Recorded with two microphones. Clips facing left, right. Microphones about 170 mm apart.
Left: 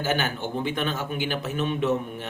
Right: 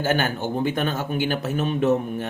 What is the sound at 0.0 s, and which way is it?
Speech, 45° right (ahead or behind).